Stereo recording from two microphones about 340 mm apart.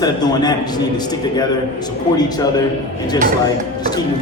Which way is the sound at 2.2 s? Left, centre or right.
Centre.